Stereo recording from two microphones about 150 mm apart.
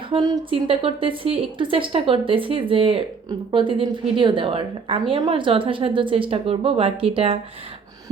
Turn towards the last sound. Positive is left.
turn(degrees=-40)  # may be behind; listen again after turning